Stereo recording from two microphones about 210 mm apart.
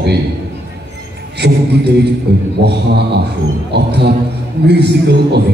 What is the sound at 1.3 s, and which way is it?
A man's voice, 55° right (ahead or behind).